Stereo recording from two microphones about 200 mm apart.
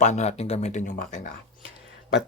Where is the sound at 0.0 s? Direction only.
35° left (ahead or behind).